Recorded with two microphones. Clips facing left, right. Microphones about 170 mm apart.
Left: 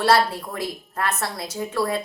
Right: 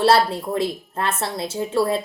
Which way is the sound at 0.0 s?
25° right (ahead or behind).